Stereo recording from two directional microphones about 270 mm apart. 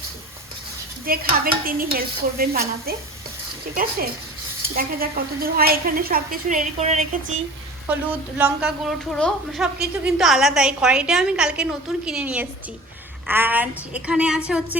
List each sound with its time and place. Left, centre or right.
1.0 s a woman's voice: right
4.7 s a woman's voice: right
8.4 s a woman's voice: centre